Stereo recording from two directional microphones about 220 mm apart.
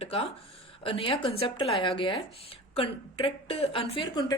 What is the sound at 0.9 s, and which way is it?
A woman's voice, 25° left (ahead or behind).